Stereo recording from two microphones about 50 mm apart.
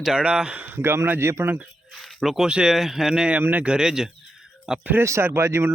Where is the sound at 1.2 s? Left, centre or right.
Right.